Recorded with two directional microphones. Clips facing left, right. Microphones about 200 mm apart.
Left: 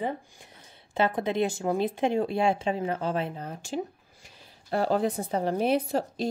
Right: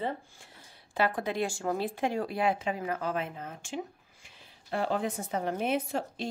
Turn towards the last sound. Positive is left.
turn(degrees=35)  # may be behind; listen again after turning